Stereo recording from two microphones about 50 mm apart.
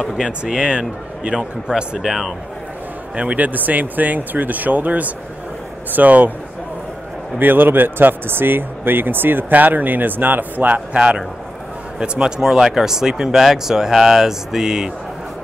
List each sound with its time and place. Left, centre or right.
0.2 s speech: centre
2.0 s speech: centre
3.2 s speech: right
7.3 s speech: right
10.9 s speech: centre